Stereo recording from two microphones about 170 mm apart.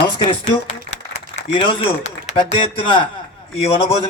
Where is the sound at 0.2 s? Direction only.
40° left (ahead or behind).